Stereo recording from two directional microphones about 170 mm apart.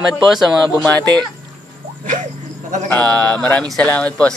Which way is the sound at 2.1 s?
50° right (ahead or behind).